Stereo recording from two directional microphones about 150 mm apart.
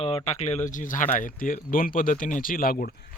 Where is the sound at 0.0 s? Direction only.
40° left (ahead or behind).